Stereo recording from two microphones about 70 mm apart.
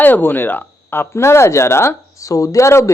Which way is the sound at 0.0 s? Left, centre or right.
Left.